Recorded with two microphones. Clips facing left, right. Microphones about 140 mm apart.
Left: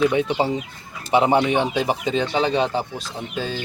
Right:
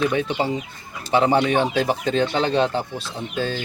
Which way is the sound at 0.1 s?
25° left (ahead or behind).